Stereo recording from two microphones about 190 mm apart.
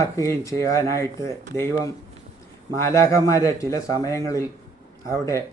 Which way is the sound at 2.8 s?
15° left (ahead or behind).